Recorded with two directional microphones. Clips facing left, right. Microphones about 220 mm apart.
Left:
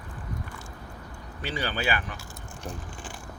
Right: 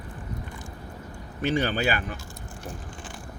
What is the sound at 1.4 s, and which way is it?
Speech, 45° right (ahead or behind).